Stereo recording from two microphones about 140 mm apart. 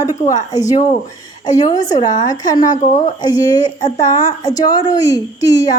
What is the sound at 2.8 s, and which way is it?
Speech, 55° left (ahead or behind).